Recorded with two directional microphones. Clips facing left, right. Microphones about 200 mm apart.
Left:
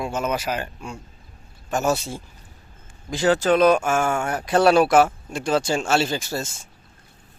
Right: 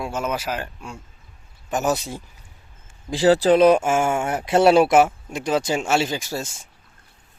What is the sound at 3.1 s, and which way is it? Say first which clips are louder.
Speech: right 3 dB; 30° right (ahead or behind).